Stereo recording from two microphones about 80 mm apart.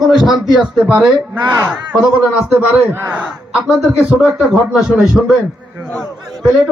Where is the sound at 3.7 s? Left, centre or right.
Centre.